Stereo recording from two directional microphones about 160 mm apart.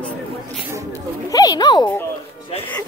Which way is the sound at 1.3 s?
25° left (ahead or behind).